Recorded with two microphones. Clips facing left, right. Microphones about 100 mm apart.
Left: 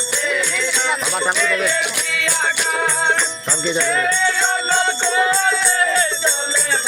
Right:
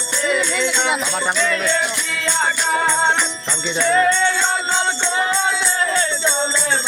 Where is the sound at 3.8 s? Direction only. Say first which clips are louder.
Right 6 dB; 30° right (ahead or behind).